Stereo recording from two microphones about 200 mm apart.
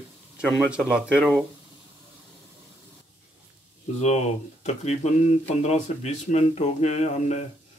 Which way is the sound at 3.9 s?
35° left (ahead or behind).